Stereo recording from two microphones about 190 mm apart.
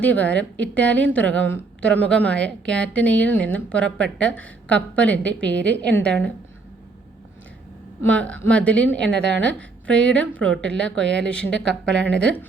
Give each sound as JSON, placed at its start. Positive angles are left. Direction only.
{"t": 0.0, "sound": "a woman's voice", "side_deg": 10}
{"t": 8.0, "sound": "a woman's voice", "side_deg": 5}
{"t": 9.1, "sound": "a woman's voice", "side_deg": -65}
{"t": 9.4, "sound": "a woman's voice", "side_deg": 5}
{"t": 10.5, "sound": "speech", "side_deg": -70}
{"t": 10.8, "sound": "speech", "side_deg": 5}
{"t": 11.0, "sound": "speech", "side_deg": -70}
{"t": 12.2, "sound": "a woman's voice", "side_deg": 5}